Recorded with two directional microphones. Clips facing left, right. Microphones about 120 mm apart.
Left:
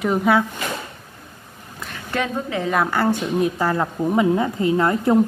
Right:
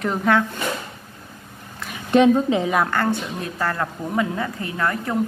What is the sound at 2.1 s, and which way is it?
Speech, 20° right (ahead or behind).